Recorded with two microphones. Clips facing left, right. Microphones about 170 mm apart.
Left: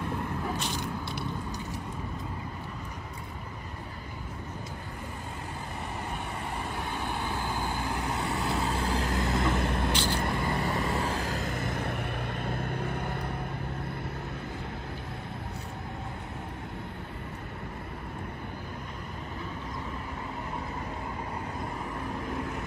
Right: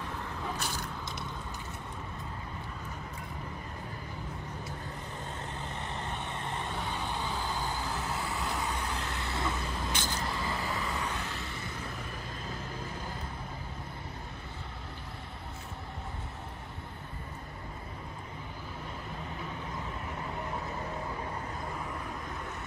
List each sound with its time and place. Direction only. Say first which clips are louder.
6.7 s vehicle: left 2 dB; 15° left (ahead or behind)
8.7 s vehicle: left 7 dB; 35° left (ahead or behind)
9.5 s vehicle: left 7 dB; 65° left (ahead or behind)
10.9 s vehicle: left 6 dB; 35° left (ahead or behind)
11.6 s vehicle: left 8 dB; 65° left (ahead or behind)